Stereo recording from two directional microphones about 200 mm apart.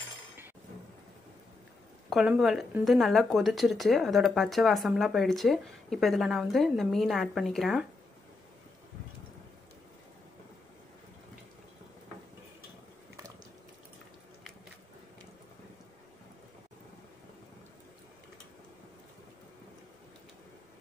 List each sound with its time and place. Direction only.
2.0 s speech: centre (ahead or behind)